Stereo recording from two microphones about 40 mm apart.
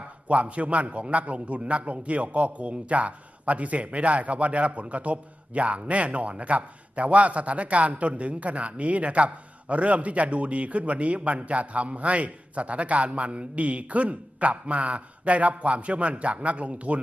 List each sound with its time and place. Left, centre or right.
0.3 s a man's voice: right